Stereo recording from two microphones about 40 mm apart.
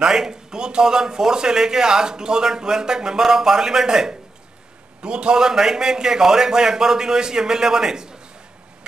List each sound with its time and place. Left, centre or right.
0.0 s speech: centre